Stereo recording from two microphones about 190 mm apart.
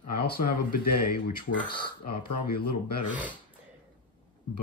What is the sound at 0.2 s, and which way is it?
Speech, 55° left (ahead or behind).